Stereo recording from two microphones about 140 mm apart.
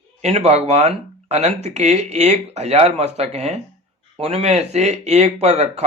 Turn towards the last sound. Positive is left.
turn(degrees=-50)  # may be behind; listen again after turning